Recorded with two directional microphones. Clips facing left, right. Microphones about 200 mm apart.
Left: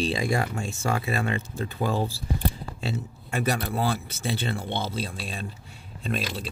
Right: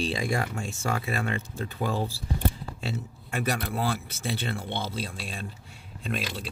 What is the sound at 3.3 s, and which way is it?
Speech, 30° left (ahead or behind).